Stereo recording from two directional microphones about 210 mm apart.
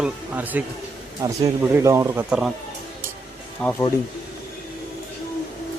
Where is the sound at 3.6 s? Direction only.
5° left (ahead or behind).